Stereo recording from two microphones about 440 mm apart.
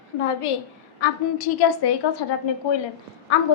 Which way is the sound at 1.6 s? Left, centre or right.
Left.